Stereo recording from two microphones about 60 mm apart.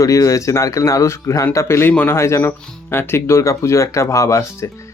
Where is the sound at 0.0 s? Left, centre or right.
Left.